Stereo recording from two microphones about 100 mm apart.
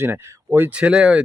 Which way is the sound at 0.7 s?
10° right (ahead or behind).